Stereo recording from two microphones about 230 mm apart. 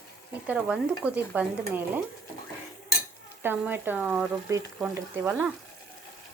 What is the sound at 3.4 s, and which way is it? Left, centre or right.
Speech, centre.